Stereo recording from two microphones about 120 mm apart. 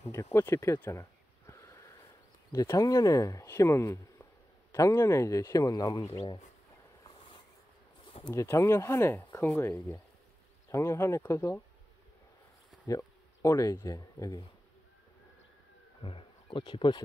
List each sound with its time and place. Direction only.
0.1 s speech: 20° left (ahead or behind)
1.5 s a sound: 20° left (ahead or behind)
2.5 s speech: 25° left (ahead or behind)
8.4 s speech: 25° left (ahead or behind)
12.8 s a sound: 30° left (ahead or behind)
13.8 s speech: 35° left (ahead or behind)
16.0 s speech: 50° left (ahead or behind)